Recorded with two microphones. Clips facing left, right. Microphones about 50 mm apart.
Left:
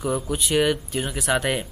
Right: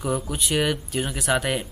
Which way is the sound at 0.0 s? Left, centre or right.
Centre.